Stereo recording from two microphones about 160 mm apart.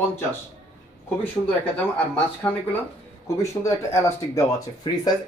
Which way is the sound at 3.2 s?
20° left (ahead or behind).